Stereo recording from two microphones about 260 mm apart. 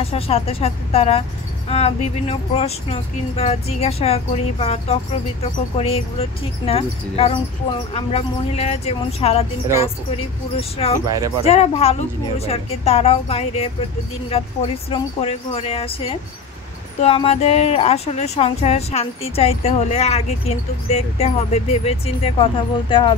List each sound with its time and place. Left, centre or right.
0.0 s speech: left
11.1 s speech: centre
11.4 s speech: left